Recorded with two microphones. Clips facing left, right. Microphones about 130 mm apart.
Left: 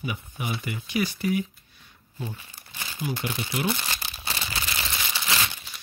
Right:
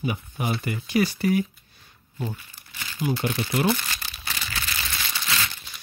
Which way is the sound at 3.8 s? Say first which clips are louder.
Left 1 dB; 25° left (ahead or behind).